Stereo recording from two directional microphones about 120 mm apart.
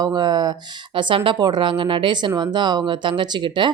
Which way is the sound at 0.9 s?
45° right (ahead or behind).